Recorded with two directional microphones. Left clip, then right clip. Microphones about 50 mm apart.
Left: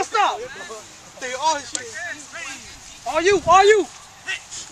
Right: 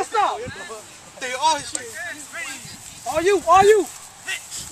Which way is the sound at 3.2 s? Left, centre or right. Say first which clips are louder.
Left 1 dB; left.